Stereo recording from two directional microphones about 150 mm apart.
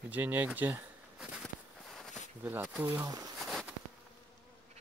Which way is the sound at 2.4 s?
15° right (ahead or behind).